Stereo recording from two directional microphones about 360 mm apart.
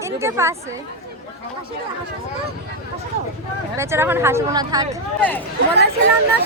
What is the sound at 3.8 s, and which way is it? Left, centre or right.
Speech, centre.